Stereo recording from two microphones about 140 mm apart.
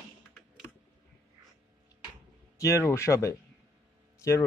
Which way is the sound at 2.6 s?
20° left (ahead or behind).